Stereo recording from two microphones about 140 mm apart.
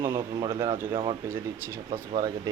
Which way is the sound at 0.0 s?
30° right (ahead or behind).